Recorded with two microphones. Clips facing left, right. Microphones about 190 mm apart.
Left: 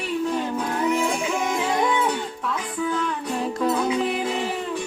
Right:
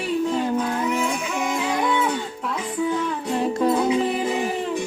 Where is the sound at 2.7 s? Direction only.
20° right (ahead or behind).